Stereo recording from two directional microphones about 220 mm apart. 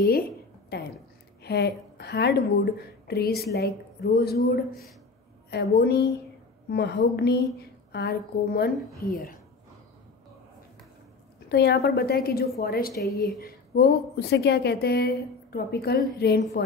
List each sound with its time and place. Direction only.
0.7 s a woman's voice: 45° left (ahead or behind)
11.4 s a woman's voice: 50° left (ahead or behind)